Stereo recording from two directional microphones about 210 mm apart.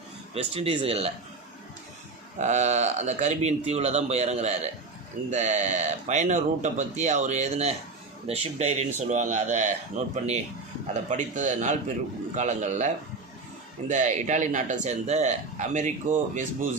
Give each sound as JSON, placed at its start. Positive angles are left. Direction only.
{"t": 0.5, "sound": "speech", "side_deg": -25}
{"t": 2.4, "sound": "speech", "side_deg": -35}